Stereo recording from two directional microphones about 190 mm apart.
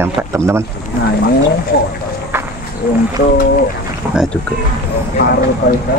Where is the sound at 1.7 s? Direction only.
60° left (ahead or behind).